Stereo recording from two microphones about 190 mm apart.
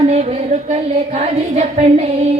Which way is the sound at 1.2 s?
35° right (ahead or behind).